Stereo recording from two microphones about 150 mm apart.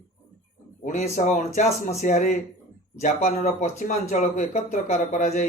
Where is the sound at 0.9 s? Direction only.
55° left (ahead or behind).